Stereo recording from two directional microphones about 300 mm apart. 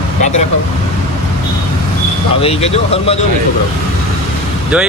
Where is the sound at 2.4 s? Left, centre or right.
Centre.